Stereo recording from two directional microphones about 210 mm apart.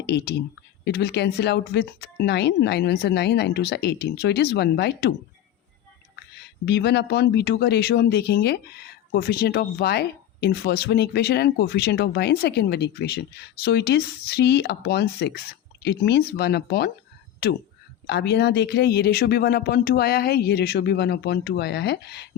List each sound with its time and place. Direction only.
0.0 s speech: 55° left (ahead or behind)
6.7 s speech: 55° left (ahead or behind)